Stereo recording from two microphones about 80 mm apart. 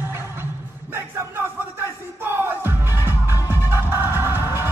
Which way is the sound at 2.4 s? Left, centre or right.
Right.